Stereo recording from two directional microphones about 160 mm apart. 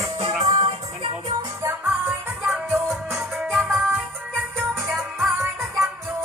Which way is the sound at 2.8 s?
Centre (ahead or behind).